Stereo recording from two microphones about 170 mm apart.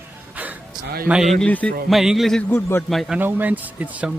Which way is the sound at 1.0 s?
5° right (ahead or behind).